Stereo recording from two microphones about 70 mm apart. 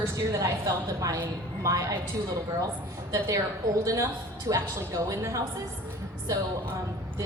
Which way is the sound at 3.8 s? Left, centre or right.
Right.